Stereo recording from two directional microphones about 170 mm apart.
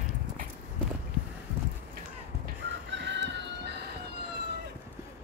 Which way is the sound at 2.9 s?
90° right.